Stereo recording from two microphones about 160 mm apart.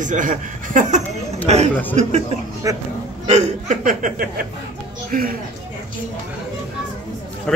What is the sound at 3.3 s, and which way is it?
Speech, 45° right (ahead or behind).